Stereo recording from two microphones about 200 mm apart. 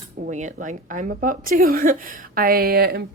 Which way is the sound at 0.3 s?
35° right (ahead or behind).